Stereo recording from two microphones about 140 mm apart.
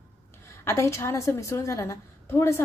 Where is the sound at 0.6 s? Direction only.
20° left (ahead or behind).